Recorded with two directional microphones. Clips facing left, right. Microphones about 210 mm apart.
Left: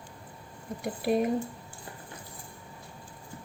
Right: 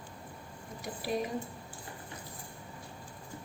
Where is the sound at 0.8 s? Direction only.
55° left (ahead or behind).